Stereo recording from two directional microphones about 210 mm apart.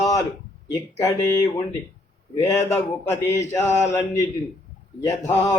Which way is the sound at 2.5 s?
15° left (ahead or behind).